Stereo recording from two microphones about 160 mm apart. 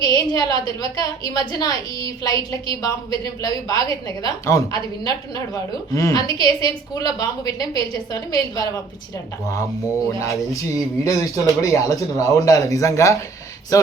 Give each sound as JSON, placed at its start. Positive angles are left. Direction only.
{"t": 0.0, "sound": "a woman's voice", "side_deg": 20}
{"t": 10.1, "sound": "a woman's voice", "side_deg": 20}